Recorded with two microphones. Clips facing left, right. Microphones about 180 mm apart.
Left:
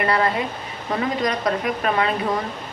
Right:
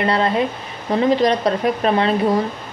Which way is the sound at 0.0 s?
25° right (ahead or behind).